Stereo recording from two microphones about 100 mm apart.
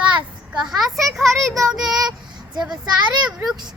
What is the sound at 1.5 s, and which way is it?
Child singing, 5° right (ahead or behind).